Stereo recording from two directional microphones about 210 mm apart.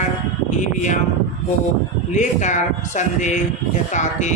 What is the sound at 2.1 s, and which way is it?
Speech, 35° left (ahead or behind).